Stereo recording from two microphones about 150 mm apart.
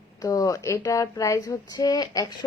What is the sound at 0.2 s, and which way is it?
Speech, 25° left (ahead or behind).